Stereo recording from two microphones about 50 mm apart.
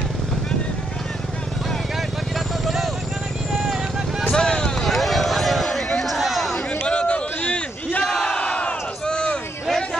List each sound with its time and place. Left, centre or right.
2.6 s vehicle: centre
4.2 s vehicle: centre
4.8 s a sound: centre
6.7 s a sound: left
8.0 s crowd: centre
8.3 s crowd: left